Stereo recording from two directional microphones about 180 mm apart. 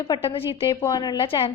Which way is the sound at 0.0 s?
25° left (ahead or behind).